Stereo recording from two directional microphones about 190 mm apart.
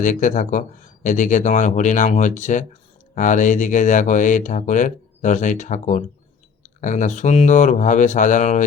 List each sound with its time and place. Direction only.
0.0 s speech: 40° left (ahead or behind)